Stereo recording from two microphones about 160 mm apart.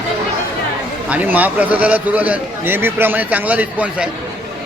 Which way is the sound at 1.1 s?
10° right (ahead or behind).